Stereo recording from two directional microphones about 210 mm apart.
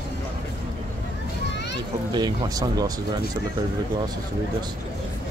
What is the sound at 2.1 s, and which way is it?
Speech, 20° right (ahead or behind).